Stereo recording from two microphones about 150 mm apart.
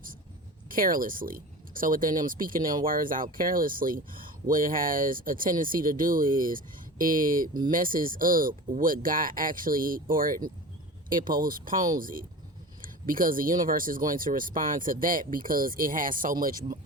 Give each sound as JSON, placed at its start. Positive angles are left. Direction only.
{"t": 0.7, "sound": "speech", "side_deg": -70}